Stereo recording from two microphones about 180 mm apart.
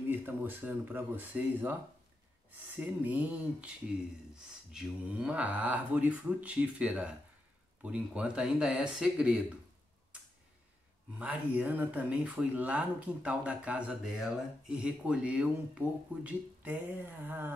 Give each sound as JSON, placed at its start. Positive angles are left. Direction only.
{"t": 0.1, "sound": "speech", "side_deg": -10}
{"t": 2.8, "sound": "speech", "side_deg": -10}
{"t": 4.7, "sound": "speech", "side_deg": -5}
{"t": 11.1, "sound": "speech", "side_deg": -10}